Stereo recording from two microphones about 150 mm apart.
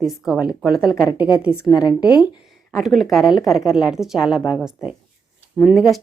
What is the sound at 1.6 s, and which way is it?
Speech, 30° left (ahead or behind).